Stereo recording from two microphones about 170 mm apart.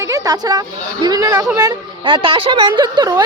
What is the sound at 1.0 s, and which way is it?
Speech, 20° right (ahead or behind).